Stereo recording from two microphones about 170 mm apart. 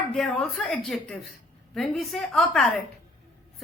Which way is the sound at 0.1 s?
Centre (ahead or behind).